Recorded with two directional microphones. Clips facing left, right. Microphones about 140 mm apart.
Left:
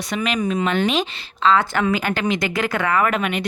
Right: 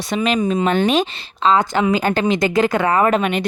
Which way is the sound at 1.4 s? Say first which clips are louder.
Right 2 dB; 15° right (ahead or behind).